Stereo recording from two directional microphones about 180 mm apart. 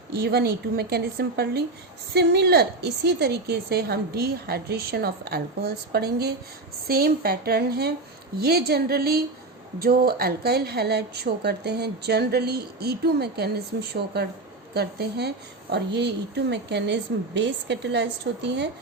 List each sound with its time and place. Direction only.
0.2 s a woman's voice: 60° right (ahead or behind)